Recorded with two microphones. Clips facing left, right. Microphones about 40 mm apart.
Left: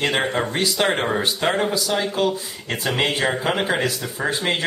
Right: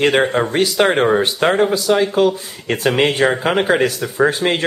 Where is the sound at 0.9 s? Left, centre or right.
Centre.